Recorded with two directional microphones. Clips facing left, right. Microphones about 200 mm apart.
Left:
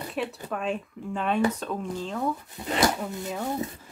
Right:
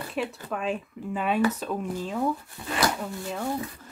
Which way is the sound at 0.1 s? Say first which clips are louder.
Right 1 dB; centre (ahead or behind).